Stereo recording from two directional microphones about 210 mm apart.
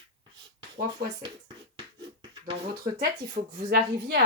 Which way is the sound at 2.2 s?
20° right (ahead or behind).